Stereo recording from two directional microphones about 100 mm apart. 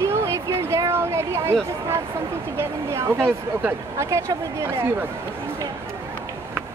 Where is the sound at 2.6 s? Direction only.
25° right (ahead or behind).